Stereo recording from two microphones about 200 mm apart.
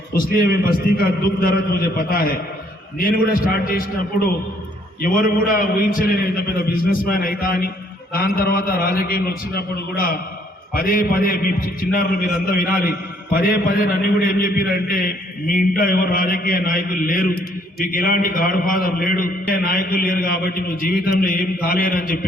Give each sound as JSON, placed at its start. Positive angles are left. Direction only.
{"t": 0.1, "sound": "a man's voice", "side_deg": 50}
{"t": 5.0, "sound": "a man's voice", "side_deg": 45}